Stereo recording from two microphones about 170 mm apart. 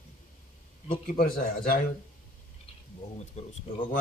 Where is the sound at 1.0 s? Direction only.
60° left (ahead or behind).